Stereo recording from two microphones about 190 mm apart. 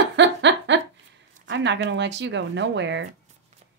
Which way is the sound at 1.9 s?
65° right (ahead or behind).